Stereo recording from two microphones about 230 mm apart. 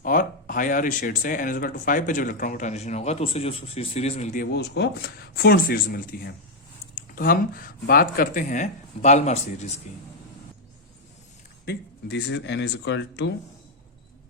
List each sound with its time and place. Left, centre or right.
0.0 s speech: left
4.5 s speech: left
11.6 s speech: left